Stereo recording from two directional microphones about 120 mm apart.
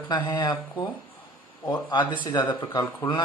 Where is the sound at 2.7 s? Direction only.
20° left (ahead or behind).